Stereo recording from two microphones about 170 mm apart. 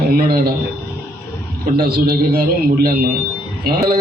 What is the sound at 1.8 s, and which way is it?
A man's voice, 60° right (ahead or behind).